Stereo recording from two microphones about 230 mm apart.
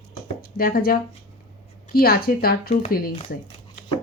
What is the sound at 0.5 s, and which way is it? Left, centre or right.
Speech, left.